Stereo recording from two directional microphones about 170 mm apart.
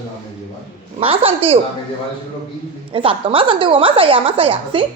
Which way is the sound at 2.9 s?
30° right (ahead or behind).